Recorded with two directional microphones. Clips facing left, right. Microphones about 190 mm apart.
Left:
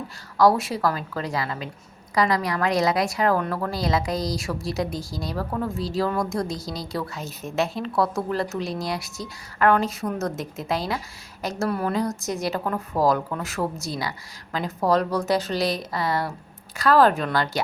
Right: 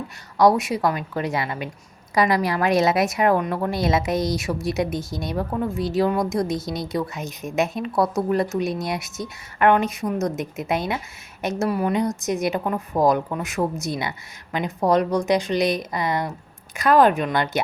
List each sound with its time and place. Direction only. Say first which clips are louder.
0.3 s a woman's voice: right 2 dB; 20° right (ahead or behind)